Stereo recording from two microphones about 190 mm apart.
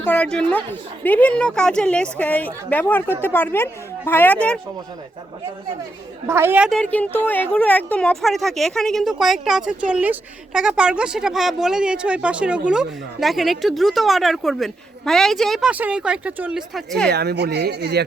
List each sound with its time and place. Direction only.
0.0 s a woman's voice: 10° left (ahead or behind)
6.2 s a woman's voice: 10° right (ahead or behind)
6.7 s a woman's voice: 5° left (ahead or behind)
17.1 s speech: 60° right (ahead or behind)